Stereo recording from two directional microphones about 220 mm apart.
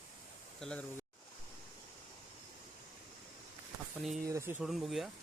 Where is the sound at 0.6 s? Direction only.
5° left (ahead or behind).